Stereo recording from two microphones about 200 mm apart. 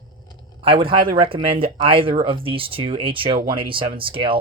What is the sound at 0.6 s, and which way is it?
Speech, 25° right (ahead or behind).